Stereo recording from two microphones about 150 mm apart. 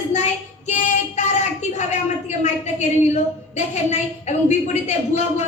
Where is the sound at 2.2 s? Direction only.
50° left (ahead or behind).